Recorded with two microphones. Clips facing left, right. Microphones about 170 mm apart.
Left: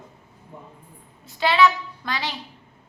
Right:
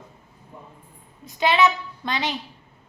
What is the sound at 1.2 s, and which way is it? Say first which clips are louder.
A woman's voice: left 1 dB; 20° right (ahead or behind).